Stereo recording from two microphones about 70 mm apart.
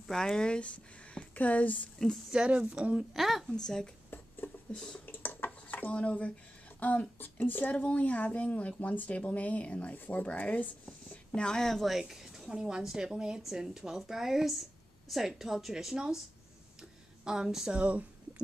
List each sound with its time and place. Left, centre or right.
0.1 s speech: centre
2.3 s a woman's voice: centre
3.2 s speech: centre
4.4 s a sound: left
4.7 s speech: centre
5.0 s a sound: left
6.8 s speech: left; by 12.0 s centre
12.0 s a woman's voice: centre
17.2 s a woman's voice: centre
17.7 s speech: right